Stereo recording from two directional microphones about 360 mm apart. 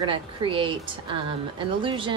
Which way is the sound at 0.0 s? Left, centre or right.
Centre.